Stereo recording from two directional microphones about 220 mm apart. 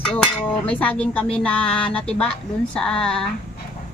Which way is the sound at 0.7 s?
5° left (ahead or behind).